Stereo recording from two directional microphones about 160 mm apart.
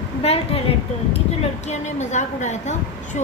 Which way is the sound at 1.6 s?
45° left (ahead or behind).